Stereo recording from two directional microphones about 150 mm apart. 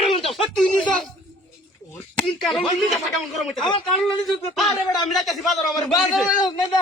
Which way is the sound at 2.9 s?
Centre (ahead or behind).